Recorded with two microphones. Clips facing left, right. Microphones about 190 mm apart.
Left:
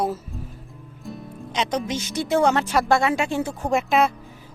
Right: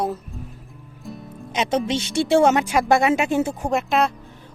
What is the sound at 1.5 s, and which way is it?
Speech, 20° right (ahead or behind).